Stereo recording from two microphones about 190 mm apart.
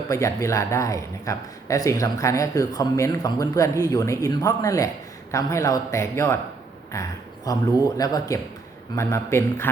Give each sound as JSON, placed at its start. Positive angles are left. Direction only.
{"t": 0.1, "sound": "speech", "side_deg": 15}